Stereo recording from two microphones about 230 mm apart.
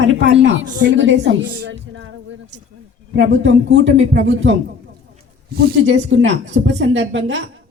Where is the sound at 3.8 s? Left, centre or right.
Right.